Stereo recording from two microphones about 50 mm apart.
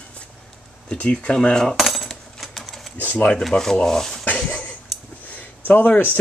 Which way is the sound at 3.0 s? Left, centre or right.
Left.